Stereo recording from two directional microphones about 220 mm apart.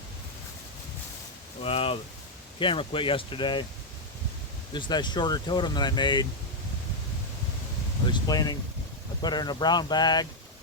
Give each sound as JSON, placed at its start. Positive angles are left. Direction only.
{"t": 1.6, "sound": "speech", "side_deg": 25}
{"t": 4.7, "sound": "speech", "side_deg": 20}
{"t": 8.0, "sound": "speech", "side_deg": 20}